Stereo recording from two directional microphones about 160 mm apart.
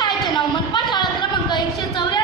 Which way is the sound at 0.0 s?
30° left (ahead or behind).